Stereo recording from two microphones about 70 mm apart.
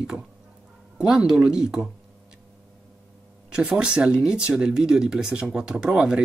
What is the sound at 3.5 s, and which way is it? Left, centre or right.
Speech, centre.